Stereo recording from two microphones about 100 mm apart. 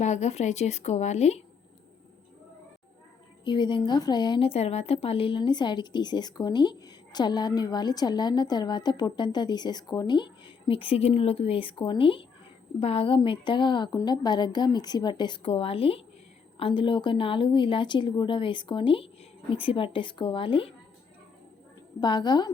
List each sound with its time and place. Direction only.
0.2 s speech: 90° left
3.4 s a woman's voice: 50° left (ahead or behind)
4.4 s a woman's voice: 90° left; by 12.2 s 60° left (ahead or behind)
12.8 s speech: 70° left (ahead or behind); by 13.9 s 50° left (ahead or behind)
13.9 s a woman's voice: 40° left (ahead or behind); by 20.7 s 65° left (ahead or behind)
22.0 s a woman's voice: 50° left (ahead or behind)